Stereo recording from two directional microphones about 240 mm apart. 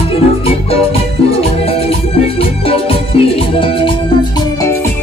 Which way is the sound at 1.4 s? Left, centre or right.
Left.